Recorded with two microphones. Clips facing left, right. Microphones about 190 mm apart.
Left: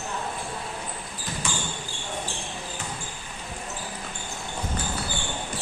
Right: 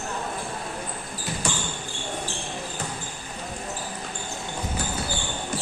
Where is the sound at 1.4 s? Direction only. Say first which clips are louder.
Right 3 dB; 35° right (ahead or behind).